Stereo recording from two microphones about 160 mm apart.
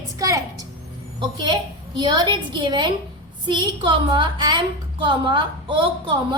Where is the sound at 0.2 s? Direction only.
20° right (ahead or behind).